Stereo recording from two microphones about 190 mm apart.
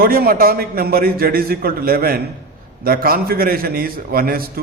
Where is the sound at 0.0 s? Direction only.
50° right (ahead or behind).